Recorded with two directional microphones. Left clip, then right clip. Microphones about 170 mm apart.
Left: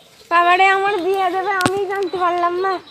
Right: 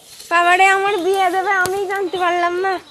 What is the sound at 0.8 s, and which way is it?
Speech, 20° right (ahead or behind).